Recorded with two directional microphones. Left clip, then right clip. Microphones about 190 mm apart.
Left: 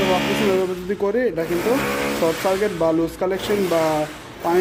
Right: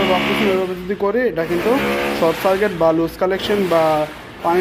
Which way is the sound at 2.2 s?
Centre (ahead or behind).